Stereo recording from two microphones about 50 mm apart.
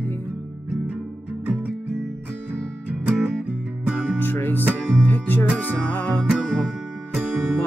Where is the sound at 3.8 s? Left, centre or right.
Centre.